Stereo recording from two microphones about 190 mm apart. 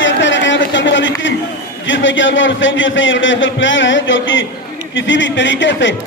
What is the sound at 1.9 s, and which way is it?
A man's voice, 75° left (ahead or behind).